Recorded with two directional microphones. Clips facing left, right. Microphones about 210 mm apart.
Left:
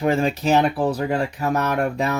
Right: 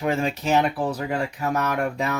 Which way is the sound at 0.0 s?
35° left (ahead or behind).